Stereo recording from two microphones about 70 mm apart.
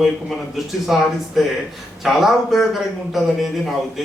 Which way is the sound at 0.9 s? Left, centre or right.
Centre.